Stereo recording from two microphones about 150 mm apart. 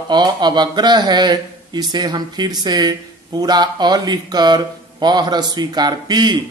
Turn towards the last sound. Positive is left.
turn(degrees=-30)  # may be behind; listen again after turning